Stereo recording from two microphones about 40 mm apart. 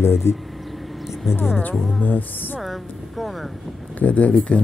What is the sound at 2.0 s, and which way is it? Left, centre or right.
Music, left.